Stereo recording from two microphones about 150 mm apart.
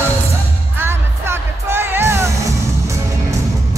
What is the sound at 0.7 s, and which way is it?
Music, 15° right (ahead or behind).